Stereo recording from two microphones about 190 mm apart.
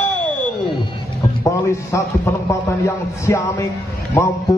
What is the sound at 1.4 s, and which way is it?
A man's voice, 15° left (ahead or behind).